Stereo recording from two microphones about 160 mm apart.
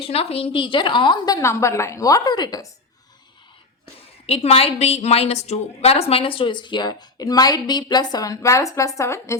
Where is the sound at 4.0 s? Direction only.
35° left (ahead or behind).